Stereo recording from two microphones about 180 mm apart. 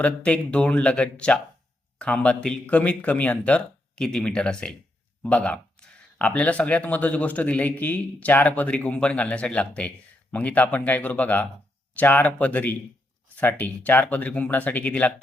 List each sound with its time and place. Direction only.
0.0 s speech: 5° left (ahead or behind)